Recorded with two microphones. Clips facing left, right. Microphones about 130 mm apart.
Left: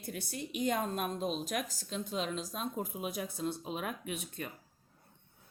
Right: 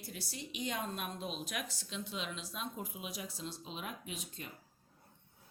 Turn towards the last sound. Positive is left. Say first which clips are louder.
# left 6 dB
turn(degrees=55)  # may be behind; listen again after turning